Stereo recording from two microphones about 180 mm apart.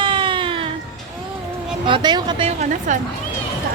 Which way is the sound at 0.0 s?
25° right (ahead or behind).